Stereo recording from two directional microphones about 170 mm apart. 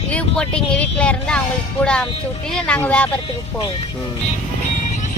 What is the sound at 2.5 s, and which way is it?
Speech, 5° left (ahead or behind).